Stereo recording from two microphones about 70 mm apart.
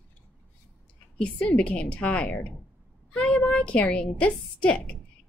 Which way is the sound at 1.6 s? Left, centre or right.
Centre.